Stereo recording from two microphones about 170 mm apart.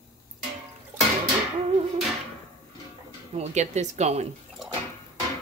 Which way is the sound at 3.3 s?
40° right (ahead or behind).